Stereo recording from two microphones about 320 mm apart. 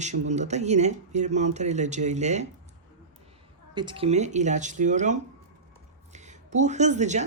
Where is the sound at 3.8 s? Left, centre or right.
Centre.